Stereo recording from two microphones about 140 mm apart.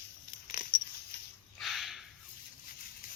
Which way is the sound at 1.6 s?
Centre (ahead or behind).